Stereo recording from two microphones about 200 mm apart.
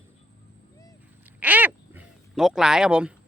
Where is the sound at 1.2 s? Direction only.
10° right (ahead or behind).